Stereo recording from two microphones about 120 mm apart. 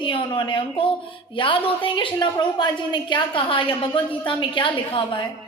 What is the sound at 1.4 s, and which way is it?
A woman's voice, 45° left (ahead or behind).